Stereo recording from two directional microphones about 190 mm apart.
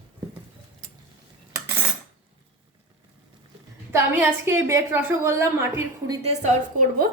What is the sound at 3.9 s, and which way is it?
A woman's voice, 10° right (ahead or behind).